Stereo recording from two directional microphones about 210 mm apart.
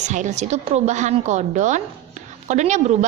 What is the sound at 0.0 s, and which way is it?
A woman's voice, 35° right (ahead or behind).